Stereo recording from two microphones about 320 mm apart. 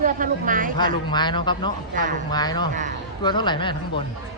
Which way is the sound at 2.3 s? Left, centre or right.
Centre.